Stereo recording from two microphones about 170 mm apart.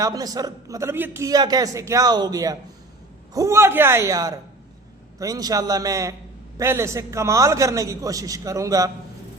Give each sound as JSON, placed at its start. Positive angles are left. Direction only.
{"t": 0.0, "sound": "a man's voice", "side_deg": -20}